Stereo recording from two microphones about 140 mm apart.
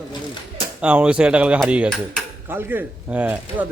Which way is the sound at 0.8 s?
10° right (ahead or behind).